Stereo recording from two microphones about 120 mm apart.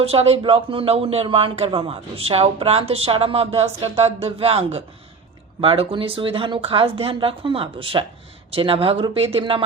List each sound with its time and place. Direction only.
0.0 s speech: 55° right (ahead or behind)